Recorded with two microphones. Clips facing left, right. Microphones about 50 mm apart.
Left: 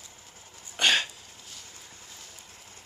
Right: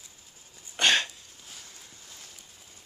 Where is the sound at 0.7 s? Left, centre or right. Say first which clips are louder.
Even; centre.